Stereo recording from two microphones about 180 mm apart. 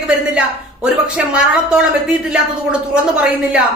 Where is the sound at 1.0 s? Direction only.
5° right (ahead or behind).